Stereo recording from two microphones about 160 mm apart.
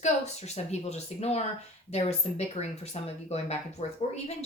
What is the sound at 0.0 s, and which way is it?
A woman's voice, 45° left (ahead or behind).